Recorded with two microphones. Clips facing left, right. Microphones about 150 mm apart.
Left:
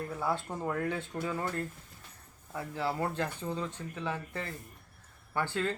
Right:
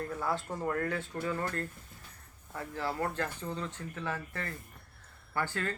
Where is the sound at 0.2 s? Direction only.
10° left (ahead or behind).